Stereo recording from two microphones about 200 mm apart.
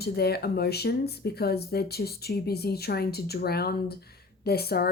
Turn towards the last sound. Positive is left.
turn(degrees=50)  # may be behind; listen again after turning